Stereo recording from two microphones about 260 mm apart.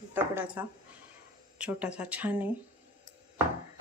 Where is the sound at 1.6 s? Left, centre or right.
Centre.